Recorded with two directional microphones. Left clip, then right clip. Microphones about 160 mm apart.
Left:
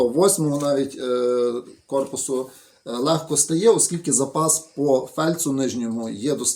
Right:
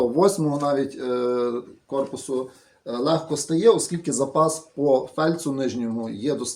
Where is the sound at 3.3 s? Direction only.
25° left (ahead or behind).